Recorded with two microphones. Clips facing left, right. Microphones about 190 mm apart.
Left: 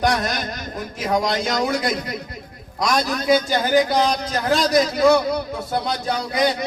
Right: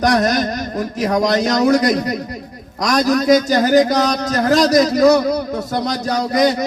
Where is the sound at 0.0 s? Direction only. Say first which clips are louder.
Right 6 dB; 40° right (ahead or behind).